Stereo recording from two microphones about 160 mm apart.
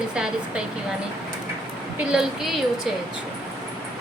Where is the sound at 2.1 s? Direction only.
Centre (ahead or behind).